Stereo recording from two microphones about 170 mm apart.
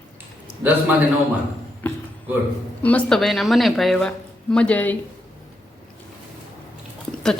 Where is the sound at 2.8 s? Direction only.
5° left (ahead or behind).